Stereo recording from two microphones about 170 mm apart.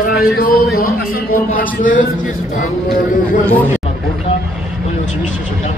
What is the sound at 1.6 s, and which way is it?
Speech, 50° left (ahead or behind).